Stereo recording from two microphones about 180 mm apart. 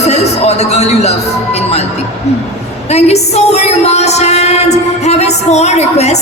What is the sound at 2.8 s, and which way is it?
A woman's voice, 35° left (ahead or behind).